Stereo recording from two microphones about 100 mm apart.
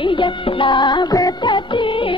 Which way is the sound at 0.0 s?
55° left (ahead or behind).